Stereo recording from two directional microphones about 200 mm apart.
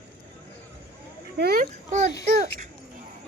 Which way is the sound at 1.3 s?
55° right (ahead or behind).